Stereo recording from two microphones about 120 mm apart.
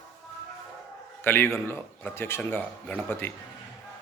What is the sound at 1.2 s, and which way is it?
A man's voice, 20° left (ahead or behind).